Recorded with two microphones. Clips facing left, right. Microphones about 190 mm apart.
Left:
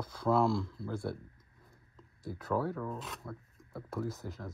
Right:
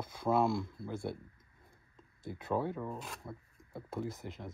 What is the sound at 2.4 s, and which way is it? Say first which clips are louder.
Speech: left 1 dB; 20° right (ahead or behind).